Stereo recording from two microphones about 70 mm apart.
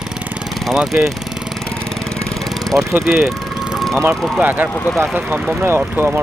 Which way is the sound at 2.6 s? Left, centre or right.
Right.